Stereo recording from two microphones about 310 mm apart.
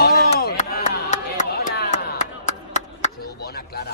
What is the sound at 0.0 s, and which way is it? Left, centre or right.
Chop, left.